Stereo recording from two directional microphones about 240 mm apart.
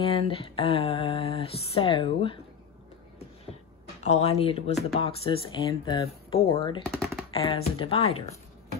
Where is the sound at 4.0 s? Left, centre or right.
Left.